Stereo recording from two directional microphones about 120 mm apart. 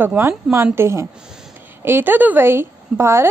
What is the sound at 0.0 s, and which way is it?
A woman's voice, 15° right (ahead or behind).